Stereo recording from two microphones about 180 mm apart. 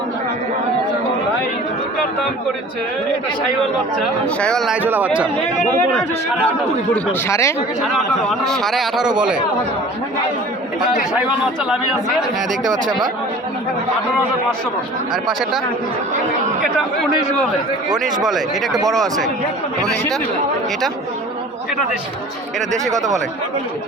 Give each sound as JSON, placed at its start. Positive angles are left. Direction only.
{"t": 4.4, "sound": "a man's voice", "side_deg": 5}
{"t": 6.9, "sound": "speech", "side_deg": 15}
{"t": 7.8, "sound": "a man's voice", "side_deg": 0}
{"t": 15.1, "sound": "a man's voice", "side_deg": 0}
{"t": 18.3, "sound": "a man's voice", "side_deg": 0}